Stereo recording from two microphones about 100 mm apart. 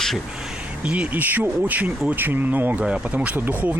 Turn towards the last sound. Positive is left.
turn(degrees=-15)  # may be behind; listen again after turning